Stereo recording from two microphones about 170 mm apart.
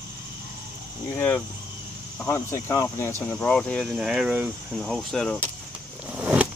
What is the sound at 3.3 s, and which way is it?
Speech, 5° left (ahead or behind).